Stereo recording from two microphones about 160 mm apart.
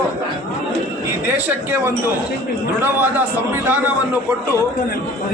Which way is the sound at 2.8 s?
10° right (ahead or behind).